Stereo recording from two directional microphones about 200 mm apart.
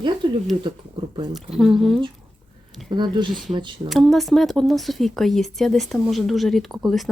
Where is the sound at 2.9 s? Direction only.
25° right (ahead or behind).